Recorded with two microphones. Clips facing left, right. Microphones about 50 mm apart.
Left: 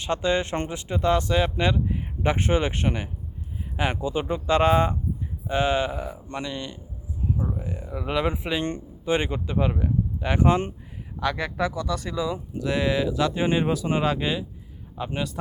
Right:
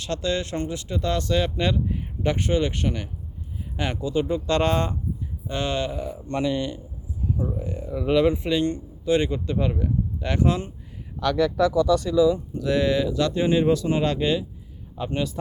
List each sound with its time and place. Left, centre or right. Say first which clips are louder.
0.0 s speech: left 2 dB; left
2.2 s speech: even; left; by 6.4 s centre
6.4 s speech: right 10 dB; centre
7.5 s speech: right 3 dB; centre
8.6 s speech: right 3 dB; left
12.5 s speech: right 2 dB; centre
13.4 s speech: right 4 dB; left
14.0 s speech: right 2 dB; centre